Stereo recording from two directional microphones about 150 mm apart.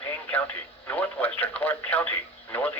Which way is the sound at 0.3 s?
10° left (ahead or behind).